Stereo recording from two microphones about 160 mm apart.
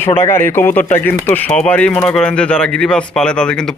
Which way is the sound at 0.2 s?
15° left (ahead or behind).